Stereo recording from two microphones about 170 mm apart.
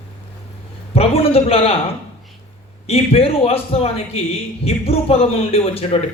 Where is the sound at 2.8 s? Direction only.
35° left (ahead or behind).